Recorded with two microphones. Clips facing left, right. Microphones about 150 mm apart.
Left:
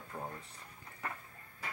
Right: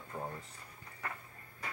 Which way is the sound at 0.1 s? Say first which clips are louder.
Right 2 dB; 10° right (ahead or behind).